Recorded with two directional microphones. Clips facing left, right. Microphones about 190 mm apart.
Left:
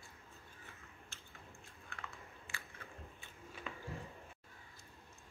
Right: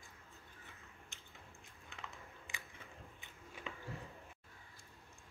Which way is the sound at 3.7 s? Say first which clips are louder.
Even; 20° right (ahead or behind).